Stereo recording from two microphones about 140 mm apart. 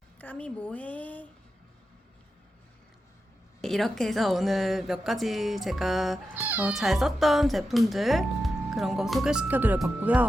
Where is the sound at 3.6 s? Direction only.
Centre (ahead or behind).